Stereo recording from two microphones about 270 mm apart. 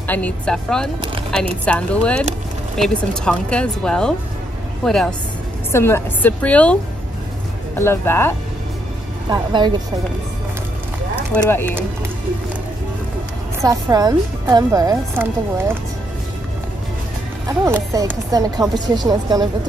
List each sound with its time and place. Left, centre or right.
0.0 s a woman's voice: centre
9.3 s a woman's voice: centre
11.3 s a woman's voice: centre
13.6 s a woman's voice: centre
17.5 s a woman's voice: centre